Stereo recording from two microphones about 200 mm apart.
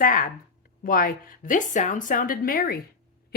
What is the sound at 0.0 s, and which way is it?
Speech, 40° left (ahead or behind).